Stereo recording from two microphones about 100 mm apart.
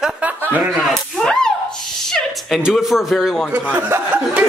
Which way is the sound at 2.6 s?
5° right (ahead or behind).